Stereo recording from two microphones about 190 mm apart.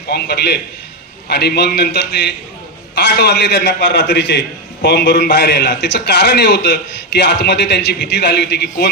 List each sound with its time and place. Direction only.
0.1 s a man's voice: 60° left (ahead or behind)